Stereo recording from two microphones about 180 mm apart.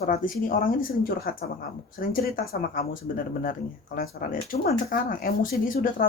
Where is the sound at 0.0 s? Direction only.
50° left (ahead or behind).